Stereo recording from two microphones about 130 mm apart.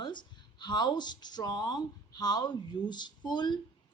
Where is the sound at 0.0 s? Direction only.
35° left (ahead or behind).